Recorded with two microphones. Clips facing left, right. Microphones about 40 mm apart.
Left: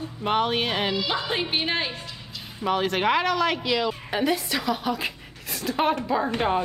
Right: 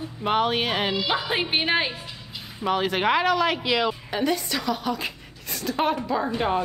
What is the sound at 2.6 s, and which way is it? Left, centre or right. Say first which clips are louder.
Speech: even; centre.